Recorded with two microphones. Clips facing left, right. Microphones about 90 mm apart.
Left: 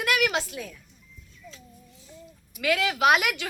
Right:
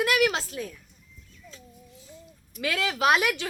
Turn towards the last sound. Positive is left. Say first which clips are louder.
# left 1 dB
turn(degrees=-30)  # may be behind; listen again after turning